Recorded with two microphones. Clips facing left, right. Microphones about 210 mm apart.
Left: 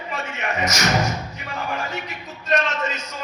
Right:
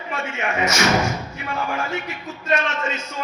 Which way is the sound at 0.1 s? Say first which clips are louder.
Right 2 dB; 40° left (ahead or behind).